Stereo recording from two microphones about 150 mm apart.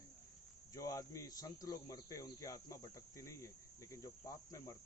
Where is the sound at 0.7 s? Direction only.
20° left (ahead or behind).